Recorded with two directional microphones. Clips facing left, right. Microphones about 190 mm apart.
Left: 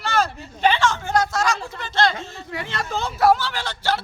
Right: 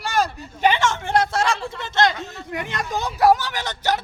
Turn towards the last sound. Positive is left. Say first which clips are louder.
# right 1 dB
turn(degrees=-20)  # may be behind; listen again after turning